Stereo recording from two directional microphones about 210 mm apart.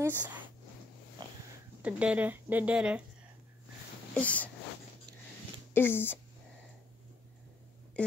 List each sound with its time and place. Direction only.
0.0 s a sound: 10° right (ahead or behind)
1.8 s speech: 5° right (ahead or behind)
4.1 s speech: 5° left (ahead or behind)
5.7 s speech: 10° left (ahead or behind)